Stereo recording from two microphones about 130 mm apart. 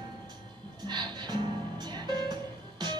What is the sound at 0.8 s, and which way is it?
Music, 35° right (ahead or behind).